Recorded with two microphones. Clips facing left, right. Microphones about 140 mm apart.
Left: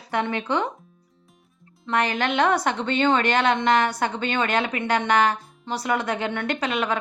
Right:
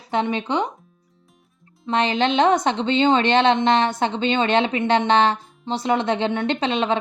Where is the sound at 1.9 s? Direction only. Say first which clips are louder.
Right 3 dB; 25° right (ahead or behind).